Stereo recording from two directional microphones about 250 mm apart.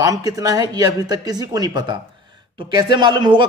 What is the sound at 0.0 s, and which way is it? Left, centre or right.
A man's voice, centre.